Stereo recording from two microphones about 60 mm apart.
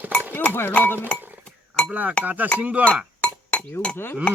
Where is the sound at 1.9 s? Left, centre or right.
Right.